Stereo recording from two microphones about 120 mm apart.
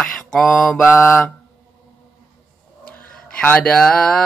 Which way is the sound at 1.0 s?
20° left (ahead or behind).